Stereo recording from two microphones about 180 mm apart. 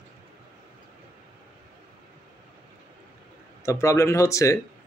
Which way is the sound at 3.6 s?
15° left (ahead or behind).